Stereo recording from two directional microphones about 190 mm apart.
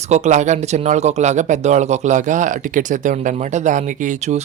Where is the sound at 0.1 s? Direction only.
40° right (ahead or behind).